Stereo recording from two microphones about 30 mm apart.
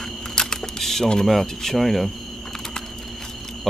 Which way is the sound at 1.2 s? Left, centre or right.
Centre.